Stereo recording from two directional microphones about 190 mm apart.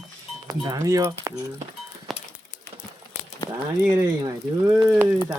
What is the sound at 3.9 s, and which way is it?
Speech, 20° right (ahead or behind).